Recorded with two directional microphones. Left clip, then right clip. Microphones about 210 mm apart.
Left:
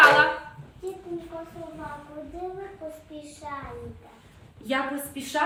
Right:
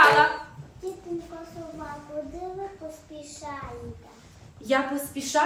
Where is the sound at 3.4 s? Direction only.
Centre (ahead or behind).